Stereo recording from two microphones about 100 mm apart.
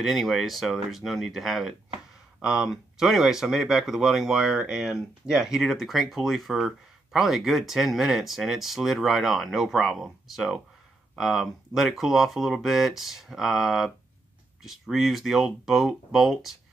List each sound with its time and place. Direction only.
0.0 s speech: centre (ahead or behind)